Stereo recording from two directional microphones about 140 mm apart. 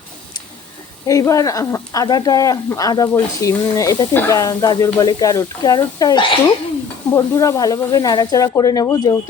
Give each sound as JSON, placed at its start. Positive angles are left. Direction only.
{"t": 1.0, "sound": "speech", "side_deg": 25}